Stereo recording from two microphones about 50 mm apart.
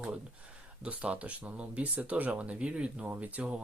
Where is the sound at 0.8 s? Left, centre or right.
Right.